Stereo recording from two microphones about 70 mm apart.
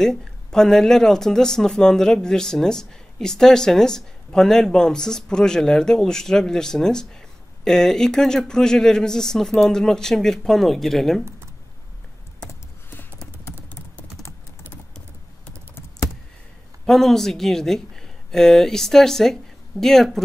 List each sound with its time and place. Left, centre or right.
0.0 s speech: centre
11.2 s computer keyboard: right
16.8 s speech: centre